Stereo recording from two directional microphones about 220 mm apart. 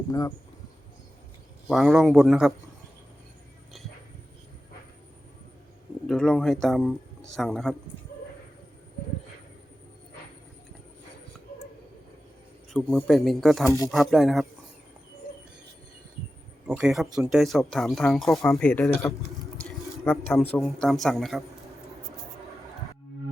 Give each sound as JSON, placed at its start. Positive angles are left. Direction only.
{"t": 0.1, "sound": "speech", "side_deg": 15}
{"t": 1.7, "sound": "speech", "side_deg": 0}
{"t": 6.1, "sound": "speech", "side_deg": 5}
{"t": 12.7, "sound": "speech", "side_deg": 5}
{"t": 13.7, "sound": "speech", "side_deg": 15}
{"t": 13.9, "sound": "speech", "side_deg": 0}
{"t": 16.6, "sound": "speech", "side_deg": -5}